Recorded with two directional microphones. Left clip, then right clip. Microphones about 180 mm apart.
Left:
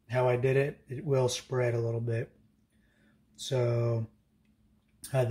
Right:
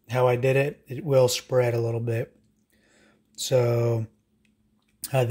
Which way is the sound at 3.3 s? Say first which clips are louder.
Right 8 dB; 55° right (ahead or behind).